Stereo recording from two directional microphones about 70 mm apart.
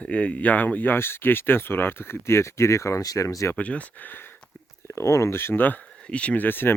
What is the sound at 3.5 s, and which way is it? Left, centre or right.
Speech, left.